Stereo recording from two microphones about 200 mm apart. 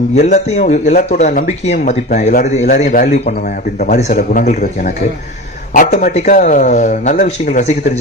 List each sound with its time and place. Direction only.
0.2 s speech: 35° left (ahead or behind)
5.7 s speech: 40° left (ahead or behind)